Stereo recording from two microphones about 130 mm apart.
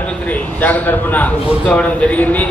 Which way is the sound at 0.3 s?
10° left (ahead or behind).